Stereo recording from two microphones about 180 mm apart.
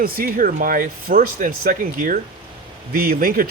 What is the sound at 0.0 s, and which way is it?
Speech, 50° right (ahead or behind).